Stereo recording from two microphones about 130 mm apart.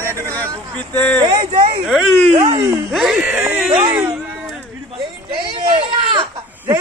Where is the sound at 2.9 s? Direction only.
5° right (ahead or behind).